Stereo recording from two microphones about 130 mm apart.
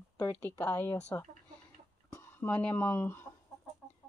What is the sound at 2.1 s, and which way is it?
Speech, 15° left (ahead or behind).